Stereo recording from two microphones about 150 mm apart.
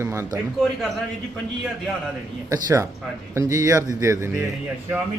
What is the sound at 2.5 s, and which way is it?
Speech, 25° right (ahead or behind).